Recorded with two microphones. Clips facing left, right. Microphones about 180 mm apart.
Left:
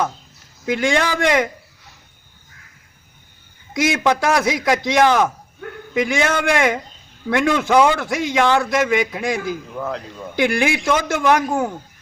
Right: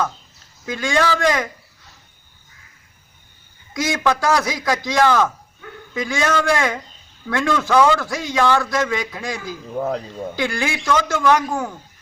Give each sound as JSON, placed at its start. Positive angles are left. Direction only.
{"t": 0.6, "sound": "a man's voice", "side_deg": 25}
{"t": 3.8, "sound": "a man's voice", "side_deg": 20}
{"t": 9.7, "sound": "a man's voice", "side_deg": -35}
{"t": 10.3, "sound": "a man's voice", "side_deg": 20}